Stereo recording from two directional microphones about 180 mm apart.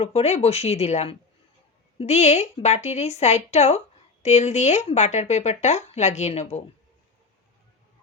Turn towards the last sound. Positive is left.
turn(degrees=40)  # may be behind; listen again after turning